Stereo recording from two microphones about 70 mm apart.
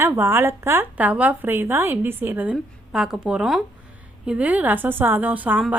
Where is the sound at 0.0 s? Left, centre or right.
Right.